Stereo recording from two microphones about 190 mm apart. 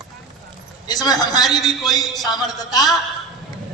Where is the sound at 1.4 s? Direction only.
Centre (ahead or behind).